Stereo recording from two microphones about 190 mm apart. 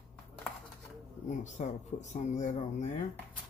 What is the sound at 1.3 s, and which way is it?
Speech, 40° left (ahead or behind).